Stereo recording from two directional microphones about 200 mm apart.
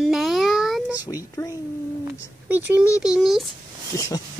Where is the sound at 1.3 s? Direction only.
15° left (ahead or behind).